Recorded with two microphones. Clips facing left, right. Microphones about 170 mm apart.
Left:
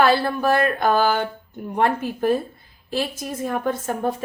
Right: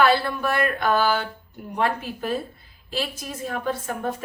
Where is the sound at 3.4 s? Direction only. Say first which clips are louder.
Left 4 dB; 45° left (ahead or behind).